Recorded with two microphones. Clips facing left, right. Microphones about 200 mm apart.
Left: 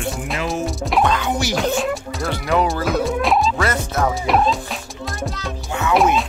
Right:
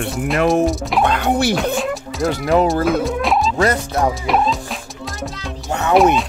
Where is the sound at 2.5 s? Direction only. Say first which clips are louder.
Right 3 dB; 35° right (ahead or behind).